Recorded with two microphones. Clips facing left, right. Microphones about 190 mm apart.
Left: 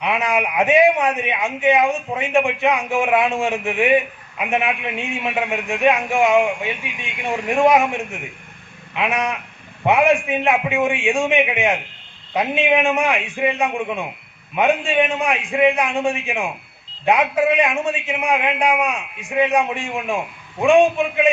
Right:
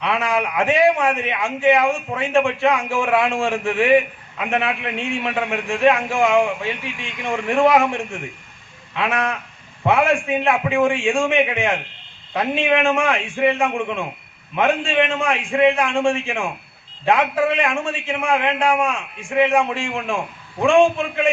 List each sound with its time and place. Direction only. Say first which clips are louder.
0.0 s a man's voice: even; 20° left (ahead or behind)